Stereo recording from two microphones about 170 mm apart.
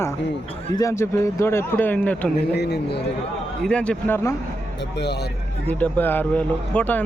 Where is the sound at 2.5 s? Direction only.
75° left (ahead or behind).